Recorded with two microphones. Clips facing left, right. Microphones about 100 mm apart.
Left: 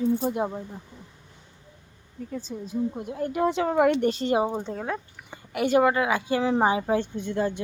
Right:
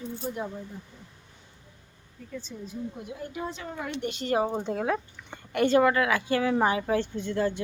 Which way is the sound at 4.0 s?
35° left (ahead or behind).